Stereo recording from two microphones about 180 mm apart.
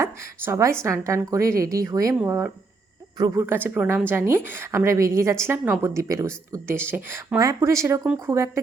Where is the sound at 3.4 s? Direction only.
10° right (ahead or behind).